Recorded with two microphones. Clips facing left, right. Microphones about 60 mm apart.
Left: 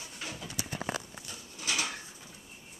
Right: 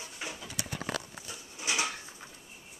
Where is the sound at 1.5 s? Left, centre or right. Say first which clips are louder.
Right 2 dB; right.